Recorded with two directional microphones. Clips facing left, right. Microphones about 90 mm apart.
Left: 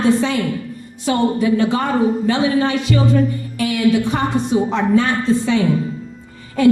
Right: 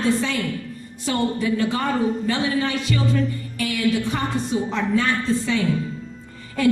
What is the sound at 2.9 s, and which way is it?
A woman's voice, 45° left (ahead or behind).